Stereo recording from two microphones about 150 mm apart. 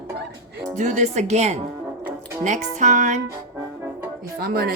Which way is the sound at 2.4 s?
55° right (ahead or behind).